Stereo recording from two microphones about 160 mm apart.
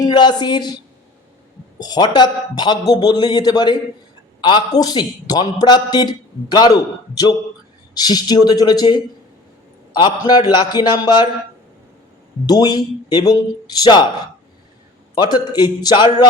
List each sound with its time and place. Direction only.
0.0 s a man's voice: 25° left (ahead or behind)
1.8 s a man's voice: 25° left (ahead or behind)
10.0 s a man's voice: 25° left (ahead or behind)
12.5 s a man's voice: 25° left (ahead or behind)
15.1 s a man's voice: 25° left (ahead or behind)